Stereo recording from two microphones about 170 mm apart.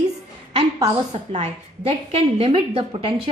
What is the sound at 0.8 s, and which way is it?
A woman's voice, 30° right (ahead or behind).